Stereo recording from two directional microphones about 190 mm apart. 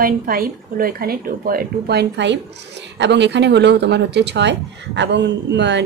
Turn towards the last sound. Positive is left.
turn(degrees=-65)  # may be behind; listen again after turning